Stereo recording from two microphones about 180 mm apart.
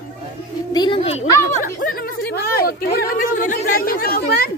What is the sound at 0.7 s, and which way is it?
Speech, 30° left (ahead or behind).